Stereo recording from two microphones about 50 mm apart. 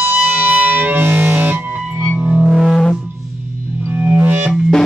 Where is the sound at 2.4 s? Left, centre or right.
Centre.